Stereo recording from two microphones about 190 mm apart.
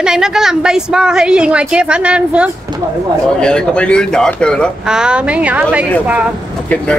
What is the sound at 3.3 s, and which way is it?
Speech, 5° left (ahead or behind).